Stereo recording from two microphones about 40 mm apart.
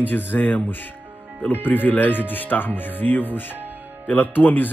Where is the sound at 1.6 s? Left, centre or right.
Left.